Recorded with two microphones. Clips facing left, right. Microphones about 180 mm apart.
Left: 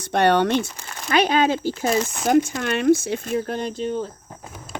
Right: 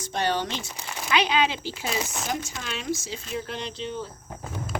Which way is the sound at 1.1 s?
50° left (ahead or behind).